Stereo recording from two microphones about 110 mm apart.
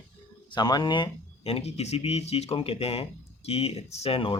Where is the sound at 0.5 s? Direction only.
40° left (ahead or behind).